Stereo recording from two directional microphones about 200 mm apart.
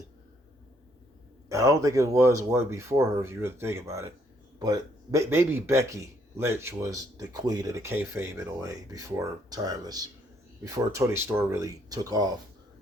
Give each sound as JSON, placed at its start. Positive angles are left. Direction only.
{"t": 1.5, "sound": "speech", "side_deg": -15}